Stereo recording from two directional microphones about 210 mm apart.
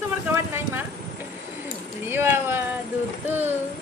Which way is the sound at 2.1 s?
10° right (ahead or behind).